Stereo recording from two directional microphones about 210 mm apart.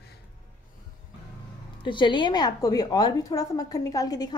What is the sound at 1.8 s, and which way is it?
A woman's voice, 20° left (ahead or behind).